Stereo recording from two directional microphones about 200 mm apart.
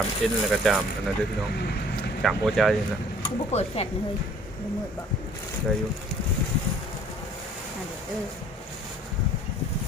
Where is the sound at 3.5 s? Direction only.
30° left (ahead or behind).